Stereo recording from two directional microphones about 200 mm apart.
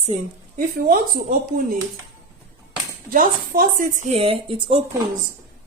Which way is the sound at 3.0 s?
45° right (ahead or behind).